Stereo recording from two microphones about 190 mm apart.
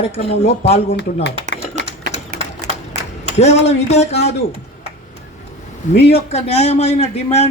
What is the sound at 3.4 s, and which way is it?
Speech, 35° left (ahead or behind).